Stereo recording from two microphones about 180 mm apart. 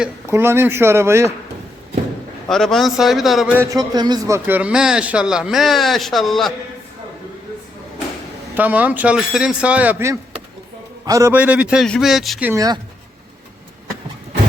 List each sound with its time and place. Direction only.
0.3 s speech: 15° right (ahead or behind)
2.5 s a man's voice: centre (ahead or behind)
8.5 s speech: 10° right (ahead or behind)
12.5 s speech: 20° right (ahead or behind)